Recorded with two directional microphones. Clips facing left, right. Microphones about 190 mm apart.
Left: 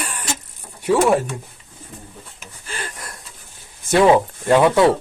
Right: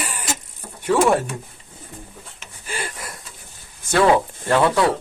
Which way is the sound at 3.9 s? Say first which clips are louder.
Left 3 dB; 20° left (ahead or behind).